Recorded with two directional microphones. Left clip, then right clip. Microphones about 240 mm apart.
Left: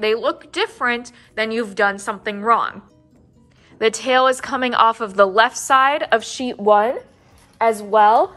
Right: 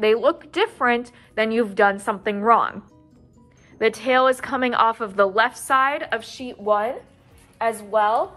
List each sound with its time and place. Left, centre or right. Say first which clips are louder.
0.0 s a woman's voice: right 1 dB; centre
6.3 s a woman's voice: left 5 dB; left